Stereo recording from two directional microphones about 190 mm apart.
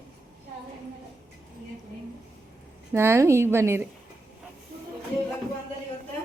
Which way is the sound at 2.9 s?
15° right (ahead or behind).